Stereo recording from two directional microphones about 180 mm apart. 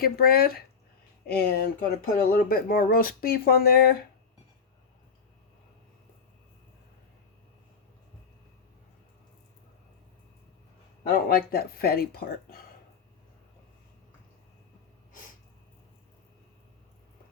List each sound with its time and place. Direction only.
0.0 s speech: 55° left (ahead or behind)
11.0 s speech: 55° left (ahead or behind)